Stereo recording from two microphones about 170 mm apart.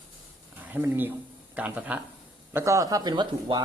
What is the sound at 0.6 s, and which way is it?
A man's voice, 10° right (ahead or behind).